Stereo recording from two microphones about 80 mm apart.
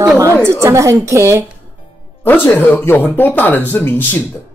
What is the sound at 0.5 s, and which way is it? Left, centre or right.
Speech, right.